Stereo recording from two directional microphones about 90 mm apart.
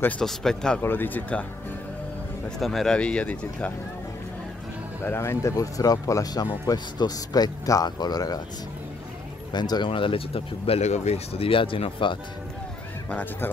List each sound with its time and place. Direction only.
0.2 s speech: 5° left (ahead or behind)
0.8 s speech: 20° left (ahead or behind)
2.6 s speech: centre (ahead or behind)
5.0 s speech: 30° left (ahead or behind); by 8.4 s 45° left (ahead or behind)
9.5 s speech: 55° left (ahead or behind)
9.8 s speech: 80° left
13.1 s speech: 20° left (ahead or behind)